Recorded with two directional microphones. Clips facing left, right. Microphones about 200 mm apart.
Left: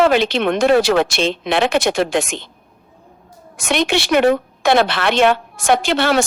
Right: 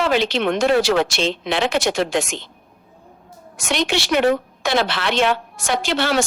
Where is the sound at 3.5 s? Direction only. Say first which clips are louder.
Left 3 dB; 55° left (ahead or behind).